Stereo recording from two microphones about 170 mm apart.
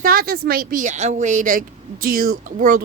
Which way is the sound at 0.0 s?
55° right (ahead or behind).